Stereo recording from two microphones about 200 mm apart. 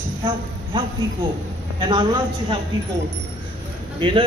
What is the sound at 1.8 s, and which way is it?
Speech, 25° right (ahead or behind).